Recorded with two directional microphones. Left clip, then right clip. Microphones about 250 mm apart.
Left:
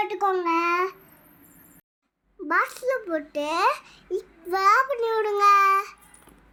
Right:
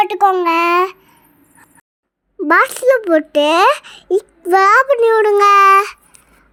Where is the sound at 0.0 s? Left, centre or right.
Right.